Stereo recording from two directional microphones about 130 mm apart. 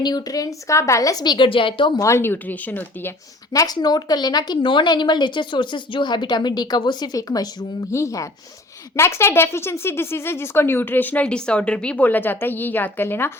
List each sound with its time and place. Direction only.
0.0 s a woman's voice: 30° left (ahead or behind)
2.0 s speech: 20° left (ahead or behind)
3.5 s a woman's voice: 30° left (ahead or behind)